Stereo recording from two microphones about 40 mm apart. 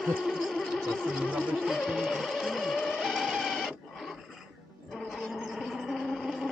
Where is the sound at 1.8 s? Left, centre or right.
Centre.